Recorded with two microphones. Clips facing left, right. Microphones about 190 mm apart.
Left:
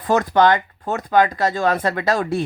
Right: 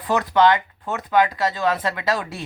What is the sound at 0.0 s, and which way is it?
Speech, 45° left (ahead or behind).